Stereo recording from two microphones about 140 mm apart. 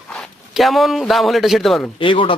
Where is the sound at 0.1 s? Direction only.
Centre (ahead or behind).